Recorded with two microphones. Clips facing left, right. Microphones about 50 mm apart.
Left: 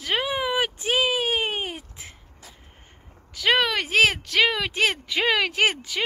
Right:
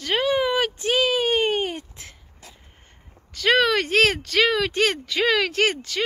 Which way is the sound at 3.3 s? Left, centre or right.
Centre.